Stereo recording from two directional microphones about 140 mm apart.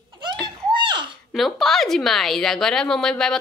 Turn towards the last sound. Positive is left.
turn(degrees=5)  # may be behind; listen again after turning